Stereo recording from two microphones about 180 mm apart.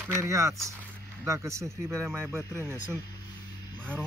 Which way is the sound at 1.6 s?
Centre (ahead or behind).